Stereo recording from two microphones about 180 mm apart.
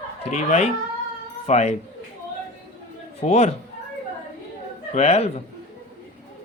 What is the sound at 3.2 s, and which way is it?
Speech, 40° left (ahead or behind).